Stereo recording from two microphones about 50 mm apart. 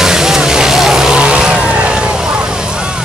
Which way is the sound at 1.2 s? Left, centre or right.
Right.